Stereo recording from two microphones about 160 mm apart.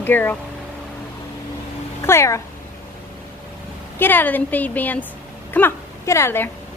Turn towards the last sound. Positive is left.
turn(degrees=15)  # may be behind; listen again after turning